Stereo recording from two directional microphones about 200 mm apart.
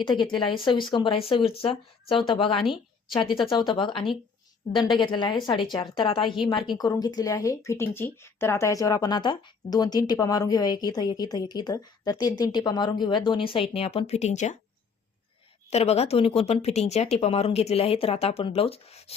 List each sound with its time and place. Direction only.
0.0 s speech: 20° left (ahead or behind)
15.7 s speech: 30° left (ahead or behind)